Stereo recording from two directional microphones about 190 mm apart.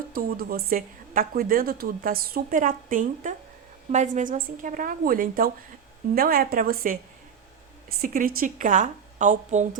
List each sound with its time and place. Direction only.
0.1 s a woman's voice: 50° right (ahead or behind)